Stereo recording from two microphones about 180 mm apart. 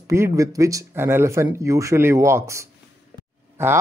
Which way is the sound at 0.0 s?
15° right (ahead or behind).